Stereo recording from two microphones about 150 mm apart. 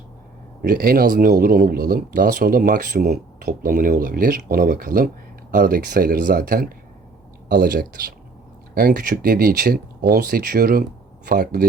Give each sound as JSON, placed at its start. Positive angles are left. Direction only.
{"t": 0.6, "sound": "speech", "side_deg": -90}